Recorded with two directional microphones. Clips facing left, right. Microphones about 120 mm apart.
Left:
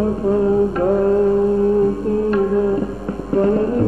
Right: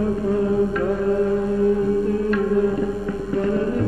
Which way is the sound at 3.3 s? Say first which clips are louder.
Left 6 dB; 40° left (ahead or behind).